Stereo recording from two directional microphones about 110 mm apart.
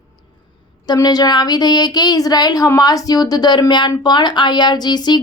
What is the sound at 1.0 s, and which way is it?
A woman's voice, 35° left (ahead or behind).